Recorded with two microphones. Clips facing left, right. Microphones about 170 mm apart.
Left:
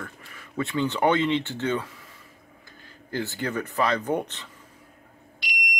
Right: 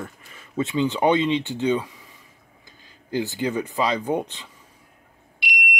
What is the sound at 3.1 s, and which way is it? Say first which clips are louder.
Speech: right 4 dB; 15° right (ahead or behind).